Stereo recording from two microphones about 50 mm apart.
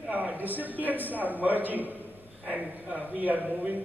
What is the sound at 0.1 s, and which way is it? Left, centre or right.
A man's voice, right.